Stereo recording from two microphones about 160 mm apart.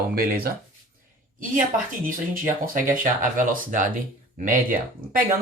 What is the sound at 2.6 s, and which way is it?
Speech, 60° right (ahead or behind).